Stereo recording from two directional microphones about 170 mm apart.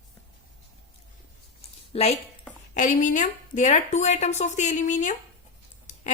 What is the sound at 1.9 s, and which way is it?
Speech, 35° left (ahead or behind).